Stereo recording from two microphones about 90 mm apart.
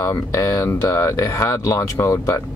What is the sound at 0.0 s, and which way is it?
Speech, 40° left (ahead or behind).